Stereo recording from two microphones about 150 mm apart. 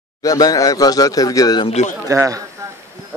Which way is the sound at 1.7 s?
50° left (ahead or behind).